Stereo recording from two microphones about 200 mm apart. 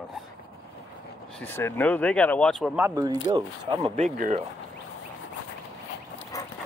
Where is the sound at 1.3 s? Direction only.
10° left (ahead or behind).